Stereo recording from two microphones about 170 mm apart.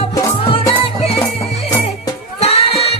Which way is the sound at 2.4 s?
35° left (ahead or behind).